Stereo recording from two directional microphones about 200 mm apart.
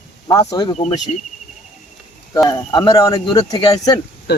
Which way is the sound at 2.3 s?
15° left (ahead or behind).